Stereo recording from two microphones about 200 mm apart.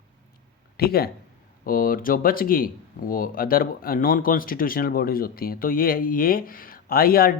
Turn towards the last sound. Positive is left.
turn(degrees=50)  # may be behind; listen again after turning